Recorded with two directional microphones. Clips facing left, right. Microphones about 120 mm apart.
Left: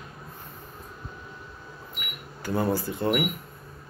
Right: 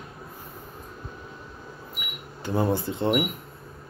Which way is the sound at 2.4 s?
25° right (ahead or behind).